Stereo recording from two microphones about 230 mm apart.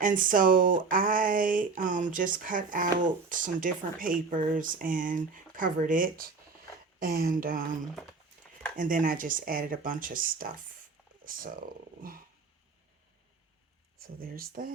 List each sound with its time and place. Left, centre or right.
0.0 s speech: right
8.7 s speech: right
14.2 s speech: right